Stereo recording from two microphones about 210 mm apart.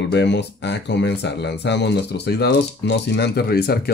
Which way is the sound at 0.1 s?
55° left (ahead or behind).